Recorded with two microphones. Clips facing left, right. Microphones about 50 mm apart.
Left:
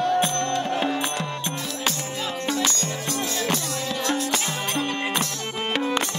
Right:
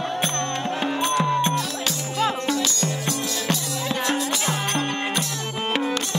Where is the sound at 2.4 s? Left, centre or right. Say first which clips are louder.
Right 1 dB; left.